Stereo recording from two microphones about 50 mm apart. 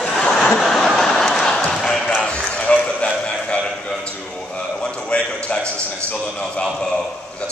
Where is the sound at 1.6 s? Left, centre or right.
Centre.